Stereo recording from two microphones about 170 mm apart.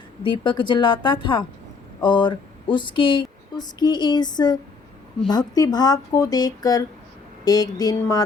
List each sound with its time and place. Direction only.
0.2 s speech: 30° left (ahead or behind)